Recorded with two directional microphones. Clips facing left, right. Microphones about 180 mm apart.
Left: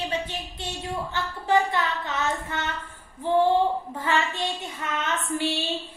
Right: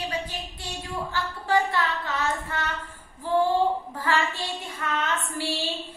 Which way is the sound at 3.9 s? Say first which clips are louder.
Left 1 dB; 20° left (ahead or behind).